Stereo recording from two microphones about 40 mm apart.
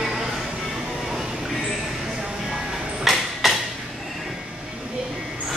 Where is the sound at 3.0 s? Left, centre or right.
Centre.